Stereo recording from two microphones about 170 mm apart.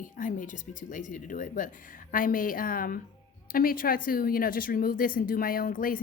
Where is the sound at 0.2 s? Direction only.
50° left (ahead or behind).